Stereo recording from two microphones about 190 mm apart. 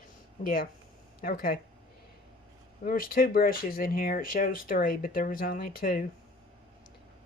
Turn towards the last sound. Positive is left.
turn(degrees=50)  # may be behind; listen again after turning